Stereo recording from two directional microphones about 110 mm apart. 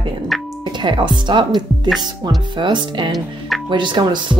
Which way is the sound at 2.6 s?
45° right (ahead or behind).